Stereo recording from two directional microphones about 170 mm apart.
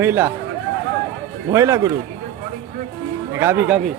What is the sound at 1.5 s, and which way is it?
Speech, 20° right (ahead or behind).